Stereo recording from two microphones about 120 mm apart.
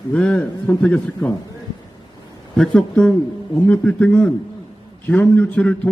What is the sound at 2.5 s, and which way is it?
A man's voice, 5° left (ahead or behind).